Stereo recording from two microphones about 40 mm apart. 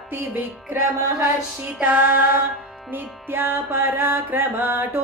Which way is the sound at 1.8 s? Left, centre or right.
Right.